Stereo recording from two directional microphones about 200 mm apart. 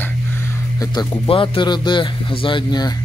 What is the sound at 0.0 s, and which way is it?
Speech, 15° left (ahead or behind).